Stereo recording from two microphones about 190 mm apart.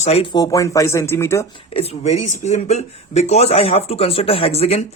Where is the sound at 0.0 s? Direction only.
30° left (ahead or behind).